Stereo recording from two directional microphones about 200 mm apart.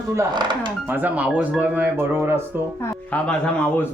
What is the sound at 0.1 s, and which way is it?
Speech, 20° right (ahead or behind).